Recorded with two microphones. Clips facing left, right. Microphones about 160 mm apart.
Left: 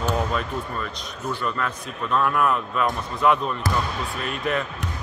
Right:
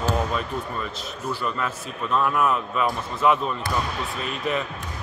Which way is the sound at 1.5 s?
5° right (ahead or behind).